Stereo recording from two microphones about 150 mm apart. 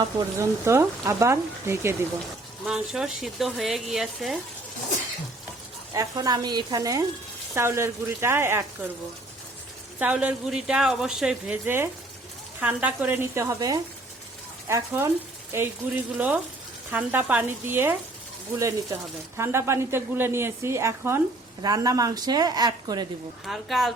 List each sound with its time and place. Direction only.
0.0 s speech: 20° right (ahead or behind)
2.6 s a woman's voice: 5° right (ahead or behind)
5.9 s speech: 25° right (ahead or behind)
10.0 s a woman's voice: 10° right (ahead or behind); by 23.0 s 25° right (ahead or behind)
23.5 s a woman's voice: centre (ahead or behind)